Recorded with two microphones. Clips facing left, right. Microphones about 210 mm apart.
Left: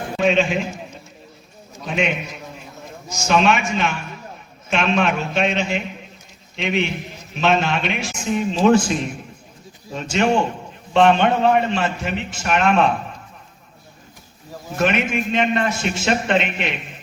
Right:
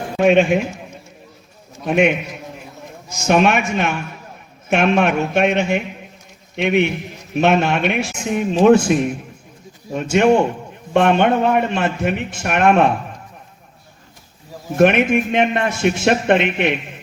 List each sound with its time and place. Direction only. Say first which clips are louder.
0.2 s a man's voice: right 5 dB; 60° right (ahead or behind)
1.8 s a man's voice: right 7 dB; 60° right (ahead or behind)
3.2 s a man's voice: right 3 dB; 55° right (ahead or behind)
14.8 s a man's voice: right 7 dB; 60° right (ahead or behind)